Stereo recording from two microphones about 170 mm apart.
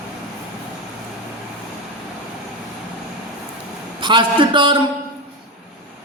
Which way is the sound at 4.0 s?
25° right (ahead or behind).